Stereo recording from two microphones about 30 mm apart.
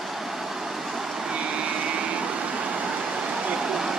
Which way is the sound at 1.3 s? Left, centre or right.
Right.